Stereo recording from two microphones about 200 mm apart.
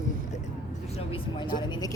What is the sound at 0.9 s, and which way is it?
Speech, 25° left (ahead or behind).